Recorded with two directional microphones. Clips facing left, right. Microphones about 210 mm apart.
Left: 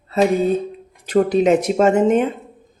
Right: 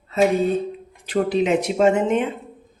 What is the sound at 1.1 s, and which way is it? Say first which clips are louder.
Speech: left 5 dB; 45° left (ahead or behind).